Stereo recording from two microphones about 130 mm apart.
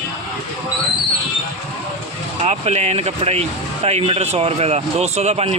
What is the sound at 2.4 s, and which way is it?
Speech, 55° right (ahead or behind).